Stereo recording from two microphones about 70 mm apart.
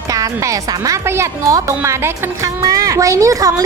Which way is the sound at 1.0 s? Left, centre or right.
Right.